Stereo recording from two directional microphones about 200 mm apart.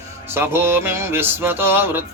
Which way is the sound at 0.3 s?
10° right (ahead or behind).